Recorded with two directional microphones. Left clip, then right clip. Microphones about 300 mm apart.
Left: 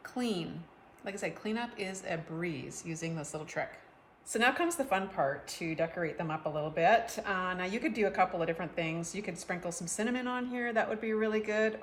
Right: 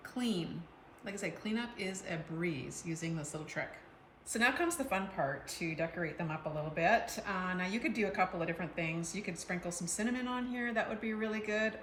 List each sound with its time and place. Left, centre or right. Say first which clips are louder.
0.2 s a woman's voice: left 2 dB; centre